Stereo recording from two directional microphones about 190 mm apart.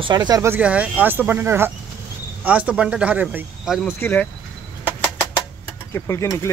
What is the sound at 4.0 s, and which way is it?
Speech, 10° left (ahead or behind).